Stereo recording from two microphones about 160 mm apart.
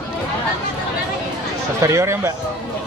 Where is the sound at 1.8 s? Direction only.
20° right (ahead or behind).